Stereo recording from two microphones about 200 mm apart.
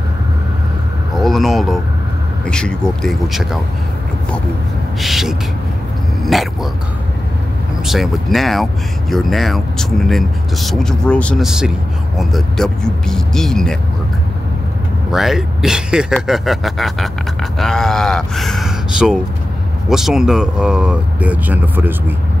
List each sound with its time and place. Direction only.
1.1 s a sound: centre (ahead or behind)
2.4 s speech: 5° left (ahead or behind)
5.0 s speech: centre (ahead or behind)
6.2 s dog: centre (ahead or behind)
7.8 s speech: centre (ahead or behind)
15.0 s speech: centre (ahead or behind)